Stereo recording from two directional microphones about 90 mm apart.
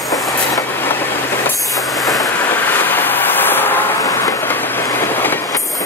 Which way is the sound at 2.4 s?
25° left (ahead or behind).